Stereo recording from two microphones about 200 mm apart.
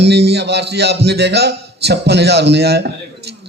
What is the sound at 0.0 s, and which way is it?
A man's voice, 55° right (ahead or behind).